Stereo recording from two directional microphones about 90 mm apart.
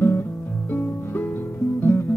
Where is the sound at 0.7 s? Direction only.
25° left (ahead or behind).